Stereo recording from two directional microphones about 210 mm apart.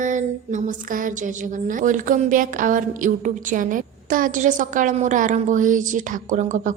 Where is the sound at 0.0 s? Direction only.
35° right (ahead or behind).